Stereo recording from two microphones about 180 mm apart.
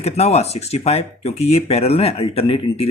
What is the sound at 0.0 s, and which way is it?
Speech, 35° left (ahead or behind).